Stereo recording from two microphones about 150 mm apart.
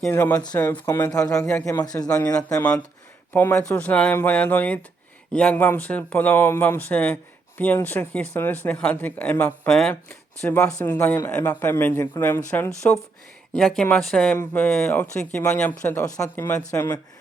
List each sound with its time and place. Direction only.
0.1 s speech: 15° left (ahead or behind)
1.6 s a man's voice: 20° left (ahead or behind)
2.3 s speech: 5° left (ahead or behind)
15.8 s speech: 15° left (ahead or behind)
16.6 s a man's voice: 25° left (ahead or behind)